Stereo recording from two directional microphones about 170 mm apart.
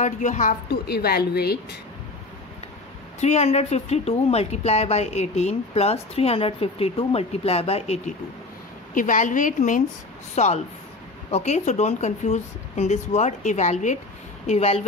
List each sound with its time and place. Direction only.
0.0 s speech: 45° left (ahead or behind)
0.7 s speech: 70° left (ahead or behind)
3.2 s speech: 40° left (ahead or behind)
8.9 s a woman's voice: 50° left (ahead or behind)